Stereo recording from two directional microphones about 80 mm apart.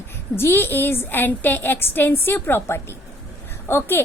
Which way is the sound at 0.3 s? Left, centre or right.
Left.